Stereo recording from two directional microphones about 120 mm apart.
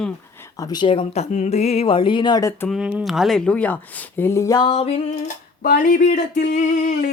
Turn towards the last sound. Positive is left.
turn(degrees=90)